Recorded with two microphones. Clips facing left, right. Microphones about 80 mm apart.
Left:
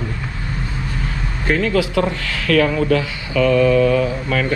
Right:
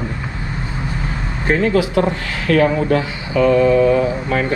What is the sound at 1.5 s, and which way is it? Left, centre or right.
Speech, right.